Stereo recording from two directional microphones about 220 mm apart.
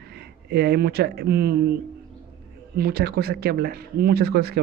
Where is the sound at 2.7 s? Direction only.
45° right (ahead or behind).